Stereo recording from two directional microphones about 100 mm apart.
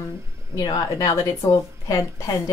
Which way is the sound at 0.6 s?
40° left (ahead or behind).